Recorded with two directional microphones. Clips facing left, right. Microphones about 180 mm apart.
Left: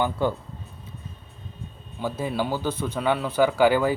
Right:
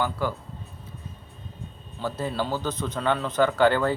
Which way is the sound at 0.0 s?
25° left (ahead or behind).